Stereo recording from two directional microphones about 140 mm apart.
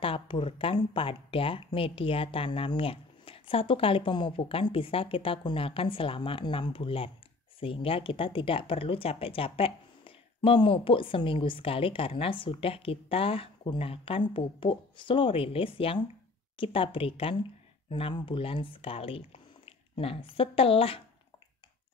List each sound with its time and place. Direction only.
0.0 s speech: 40° left (ahead or behind)